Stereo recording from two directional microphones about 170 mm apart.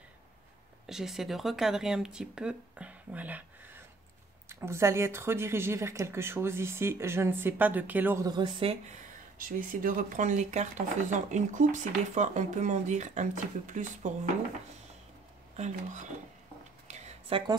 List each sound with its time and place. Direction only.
0.8 s a woman's voice: centre (ahead or behind)
8.3 s speech: 30° right (ahead or behind)
9.4 s speech: 55° right (ahead or behind)
15.5 s speech: 45° right (ahead or behind)
16.8 s a sound: 40° right (ahead or behind)